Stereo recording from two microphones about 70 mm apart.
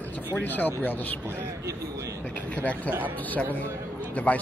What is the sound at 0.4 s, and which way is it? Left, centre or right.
Speech, left.